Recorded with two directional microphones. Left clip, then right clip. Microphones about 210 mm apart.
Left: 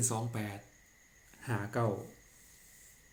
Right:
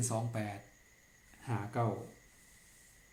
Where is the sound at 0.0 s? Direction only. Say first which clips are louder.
Left 1 dB; 5° left (ahead or behind).